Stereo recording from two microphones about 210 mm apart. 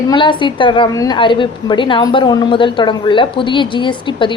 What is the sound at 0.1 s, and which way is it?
A woman's voice, 25° left (ahead or behind).